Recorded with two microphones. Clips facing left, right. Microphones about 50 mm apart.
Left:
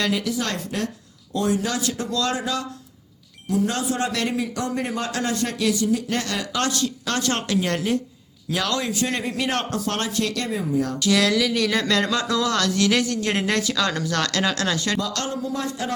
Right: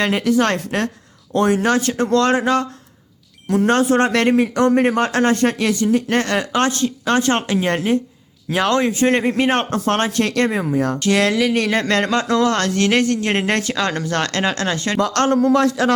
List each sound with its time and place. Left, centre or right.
0.0 s a man's voice: right
10.1 s speech: right
15.0 s a man's voice: right